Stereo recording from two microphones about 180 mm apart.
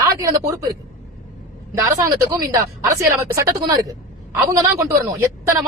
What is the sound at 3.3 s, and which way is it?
A woman's voice, 20° right (ahead or behind).